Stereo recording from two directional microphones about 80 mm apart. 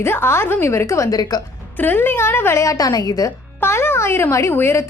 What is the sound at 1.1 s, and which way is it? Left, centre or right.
Speech, left.